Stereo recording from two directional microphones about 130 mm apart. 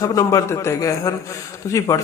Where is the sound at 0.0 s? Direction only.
25° left (ahead or behind).